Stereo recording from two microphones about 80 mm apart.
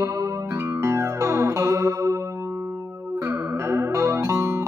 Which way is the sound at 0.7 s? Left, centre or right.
Right.